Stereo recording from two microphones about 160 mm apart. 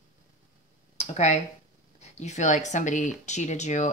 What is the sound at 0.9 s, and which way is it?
Speech, 45° left (ahead or behind).